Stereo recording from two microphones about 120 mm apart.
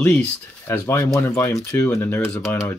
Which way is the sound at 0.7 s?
20° left (ahead or behind).